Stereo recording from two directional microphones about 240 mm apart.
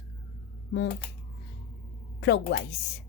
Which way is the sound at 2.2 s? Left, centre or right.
Left.